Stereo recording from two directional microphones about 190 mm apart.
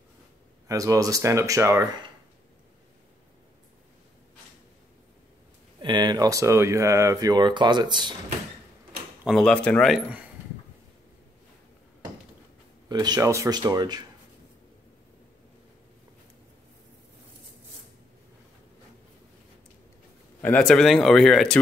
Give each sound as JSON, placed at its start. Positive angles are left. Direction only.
{"t": 0.7, "sound": "speech", "side_deg": -15}
{"t": 5.8, "sound": "speech", "side_deg": -25}
{"t": 9.2, "sound": "speech", "side_deg": 0}
{"t": 12.8, "sound": "speech", "side_deg": -20}
{"t": 20.4, "sound": "speech", "side_deg": 5}